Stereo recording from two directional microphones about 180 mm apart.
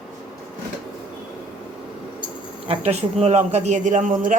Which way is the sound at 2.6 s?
35° right (ahead or behind).